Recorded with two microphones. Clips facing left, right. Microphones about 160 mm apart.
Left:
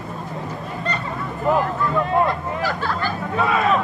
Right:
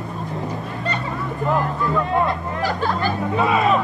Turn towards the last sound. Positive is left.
turn(degrees=-5)  # may be behind; listen again after turning